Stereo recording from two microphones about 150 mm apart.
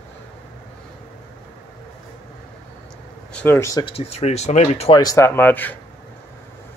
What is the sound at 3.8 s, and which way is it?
Speech, 40° left (ahead or behind).